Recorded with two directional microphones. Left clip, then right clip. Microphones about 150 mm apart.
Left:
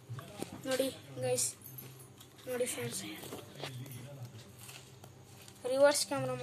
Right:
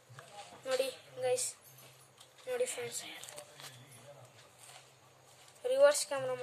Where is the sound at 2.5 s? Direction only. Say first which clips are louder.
Even; 5° right (ahead or behind).